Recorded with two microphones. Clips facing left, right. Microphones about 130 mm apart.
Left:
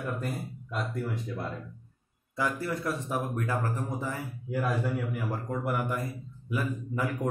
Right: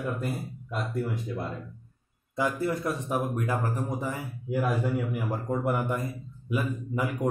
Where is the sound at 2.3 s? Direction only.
20° right (ahead or behind).